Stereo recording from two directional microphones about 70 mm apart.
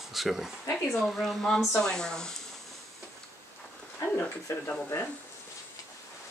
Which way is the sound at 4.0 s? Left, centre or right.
Left.